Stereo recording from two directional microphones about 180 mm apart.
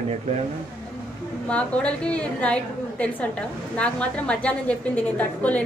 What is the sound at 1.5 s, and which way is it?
A woman's voice, 5° left (ahead or behind).